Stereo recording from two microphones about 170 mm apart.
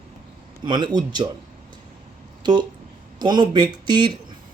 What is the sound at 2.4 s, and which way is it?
Speech, 25° right (ahead or behind).